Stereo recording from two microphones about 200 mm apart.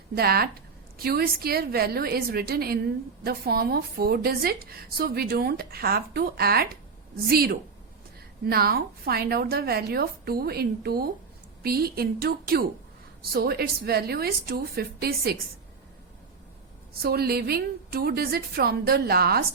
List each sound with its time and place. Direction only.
0.1 s a woman's voice: 50° right (ahead or behind)
17.0 s a woman's voice: 50° right (ahead or behind)